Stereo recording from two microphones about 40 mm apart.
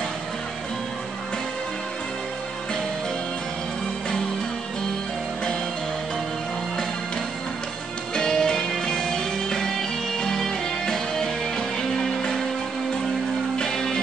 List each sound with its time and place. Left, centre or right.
8.1 s music: centre
13.6 s music: centre